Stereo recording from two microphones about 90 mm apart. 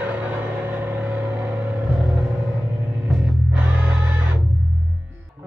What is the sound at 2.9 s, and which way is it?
Music, 15° right (ahead or behind).